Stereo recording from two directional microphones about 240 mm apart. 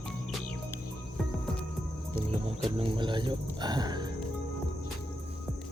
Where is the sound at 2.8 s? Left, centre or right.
Centre.